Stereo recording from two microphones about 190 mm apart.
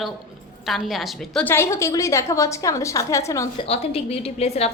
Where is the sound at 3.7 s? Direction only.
30° left (ahead or behind).